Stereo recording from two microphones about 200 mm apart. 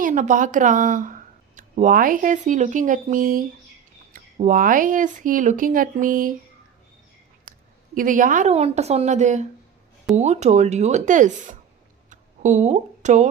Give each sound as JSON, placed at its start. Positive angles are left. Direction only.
{"t": 0.0, "sound": "speech", "side_deg": -40}
{"t": 7.9, "sound": "speech", "side_deg": -40}
{"t": 12.1, "sound": "a sound", "side_deg": -40}